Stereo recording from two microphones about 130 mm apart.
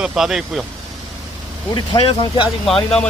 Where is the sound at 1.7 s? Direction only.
40° left (ahead or behind).